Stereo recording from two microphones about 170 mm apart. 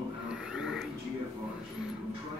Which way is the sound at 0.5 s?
5° right (ahead or behind).